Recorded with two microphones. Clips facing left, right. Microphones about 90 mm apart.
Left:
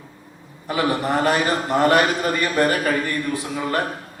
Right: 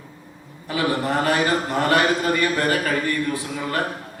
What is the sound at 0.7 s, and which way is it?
A man's voice, 20° left (ahead or behind).